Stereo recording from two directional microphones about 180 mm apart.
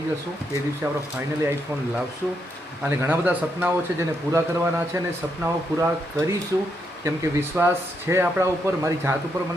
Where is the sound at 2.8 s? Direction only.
10° right (ahead or behind).